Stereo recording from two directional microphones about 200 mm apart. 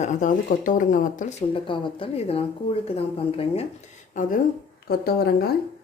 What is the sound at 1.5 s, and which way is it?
Speech, 25° left (ahead or behind).